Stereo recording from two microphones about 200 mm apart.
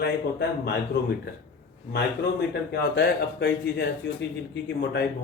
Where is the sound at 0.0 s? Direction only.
55° left (ahead or behind).